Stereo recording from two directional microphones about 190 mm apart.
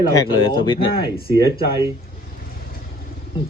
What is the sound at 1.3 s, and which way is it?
Speech, 15° right (ahead or behind).